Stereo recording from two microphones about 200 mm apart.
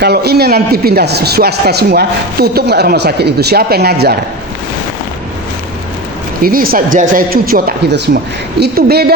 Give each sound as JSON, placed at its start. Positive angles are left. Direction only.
{"t": 0.0, "sound": "a man's voice", "side_deg": -55}
{"t": 6.4, "sound": "a man's voice", "side_deg": -45}